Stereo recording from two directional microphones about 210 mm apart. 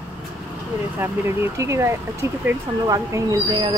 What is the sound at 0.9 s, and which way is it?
Speech, 15° right (ahead or behind).